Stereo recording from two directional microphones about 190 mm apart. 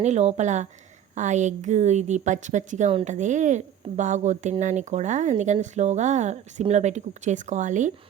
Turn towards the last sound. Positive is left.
turn(degrees=-40)  # may be behind; listen again after turning